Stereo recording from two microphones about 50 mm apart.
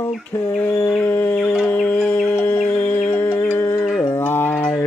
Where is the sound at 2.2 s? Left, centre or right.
Centre.